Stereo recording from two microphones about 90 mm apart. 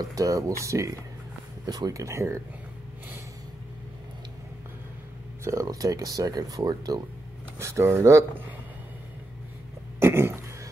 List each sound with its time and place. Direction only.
0.0 s speech: 40° right (ahead or behind)
5.4 s speech: 35° right (ahead or behind)
7.5 s speech: 30° right (ahead or behind)
9.9 s a sound: 30° right (ahead or behind)